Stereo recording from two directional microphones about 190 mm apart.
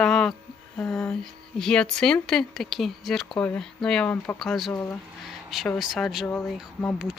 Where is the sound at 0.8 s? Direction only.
5° left (ahead or behind).